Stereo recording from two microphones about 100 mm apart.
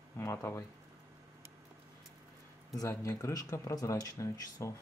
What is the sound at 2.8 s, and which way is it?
Speech, 35° left (ahead or behind).